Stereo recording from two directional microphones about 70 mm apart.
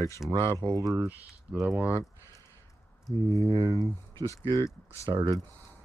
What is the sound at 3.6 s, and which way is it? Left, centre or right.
Speech, right.